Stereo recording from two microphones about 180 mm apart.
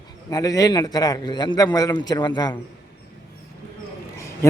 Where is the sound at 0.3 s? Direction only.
20° left (ahead or behind).